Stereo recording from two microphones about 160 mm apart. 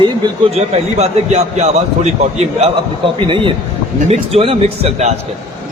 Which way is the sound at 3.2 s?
30° right (ahead or behind).